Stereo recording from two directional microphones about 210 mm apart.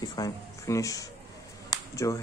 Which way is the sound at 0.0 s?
20° left (ahead or behind).